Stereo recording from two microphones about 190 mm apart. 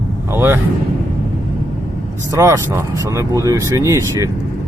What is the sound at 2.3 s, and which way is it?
Speech, 15° right (ahead or behind).